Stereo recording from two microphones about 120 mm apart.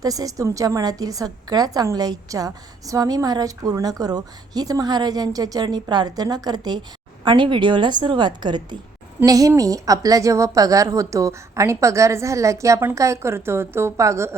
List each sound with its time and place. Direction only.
0.0 s a woman's voice: 30° right (ahead or behind)